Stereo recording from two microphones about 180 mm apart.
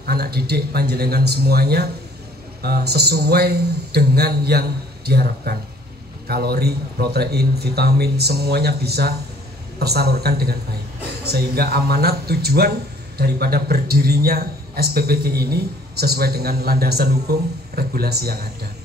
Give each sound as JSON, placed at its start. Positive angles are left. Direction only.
{"t": 0.0, "sound": "speech", "side_deg": -60}